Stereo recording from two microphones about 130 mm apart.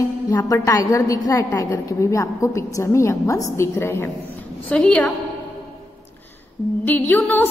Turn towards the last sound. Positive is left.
turn(degrees=15)  # may be behind; listen again after turning